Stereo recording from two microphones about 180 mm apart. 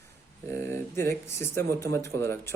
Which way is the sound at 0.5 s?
15° left (ahead or behind).